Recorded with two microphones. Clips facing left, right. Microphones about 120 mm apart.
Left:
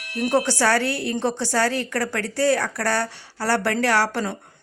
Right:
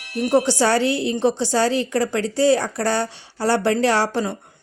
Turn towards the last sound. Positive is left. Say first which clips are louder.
# right 2 dB
turn(degrees=-20)  # may be behind; listen again after turning